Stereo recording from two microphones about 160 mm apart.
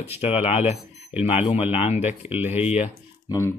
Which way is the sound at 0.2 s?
40° left (ahead or behind).